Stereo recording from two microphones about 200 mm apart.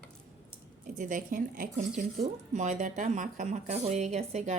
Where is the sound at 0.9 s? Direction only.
40° right (ahead or behind).